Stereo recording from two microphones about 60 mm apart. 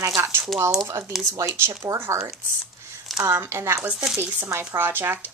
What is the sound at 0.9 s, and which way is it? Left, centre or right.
Speech, right.